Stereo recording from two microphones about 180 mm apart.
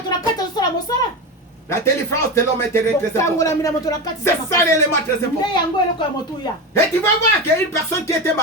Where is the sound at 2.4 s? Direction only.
15° left (ahead or behind).